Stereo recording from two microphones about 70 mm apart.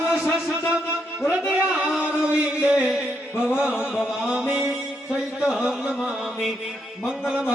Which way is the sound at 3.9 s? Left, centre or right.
Centre.